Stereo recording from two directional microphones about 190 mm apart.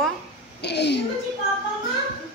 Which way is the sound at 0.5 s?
65° left (ahead or behind).